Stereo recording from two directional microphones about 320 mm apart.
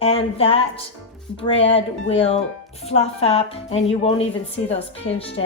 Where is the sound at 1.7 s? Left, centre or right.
Centre.